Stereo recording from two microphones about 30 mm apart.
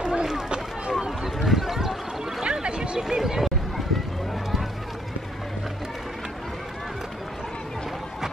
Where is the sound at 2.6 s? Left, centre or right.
Right.